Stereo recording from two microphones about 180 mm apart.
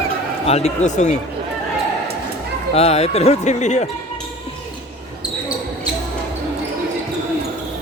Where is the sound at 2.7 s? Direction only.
35° left (ahead or behind).